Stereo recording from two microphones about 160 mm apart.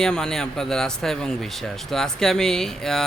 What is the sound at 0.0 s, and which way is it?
Speech, 5° left (ahead or behind).